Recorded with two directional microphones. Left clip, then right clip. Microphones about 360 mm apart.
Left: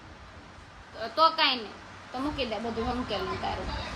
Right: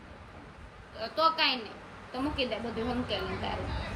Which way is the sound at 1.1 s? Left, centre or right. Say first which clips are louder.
Left 3 dB; centre.